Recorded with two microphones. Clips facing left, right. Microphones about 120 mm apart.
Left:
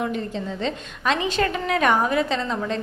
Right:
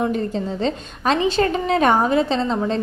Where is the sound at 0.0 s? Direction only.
35° right (ahead or behind).